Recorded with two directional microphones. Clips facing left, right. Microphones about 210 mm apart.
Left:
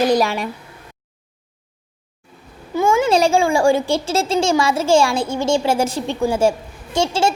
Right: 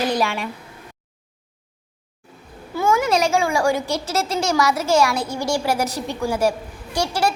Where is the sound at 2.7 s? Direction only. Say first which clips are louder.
Left 3 dB; 20° left (ahead or behind).